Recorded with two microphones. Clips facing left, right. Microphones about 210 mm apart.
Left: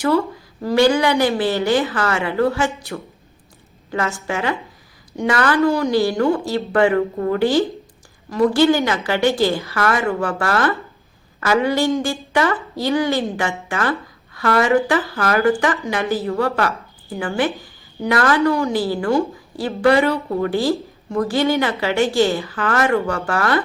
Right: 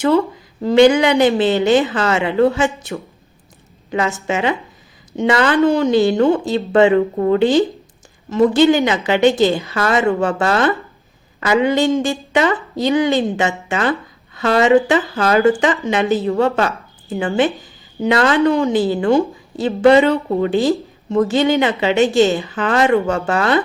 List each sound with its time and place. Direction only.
0.6 s a woman's voice: 20° right (ahead or behind)